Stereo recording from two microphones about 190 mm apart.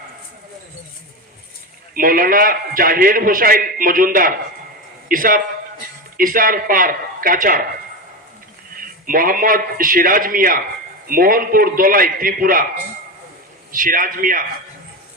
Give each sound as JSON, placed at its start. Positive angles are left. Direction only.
{"t": 1.9, "sound": "a man's voice", "side_deg": -50}
{"t": 8.7, "sound": "a man's voice", "side_deg": -45}
{"t": 13.7, "sound": "a man's voice", "side_deg": -45}